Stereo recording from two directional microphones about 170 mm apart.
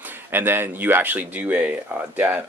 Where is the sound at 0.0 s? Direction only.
10° right (ahead or behind).